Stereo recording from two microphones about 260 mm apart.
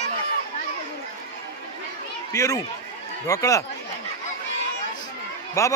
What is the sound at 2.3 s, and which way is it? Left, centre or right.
Speech, centre.